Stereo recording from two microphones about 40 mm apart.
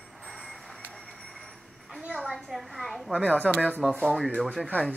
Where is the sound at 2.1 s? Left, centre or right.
Centre.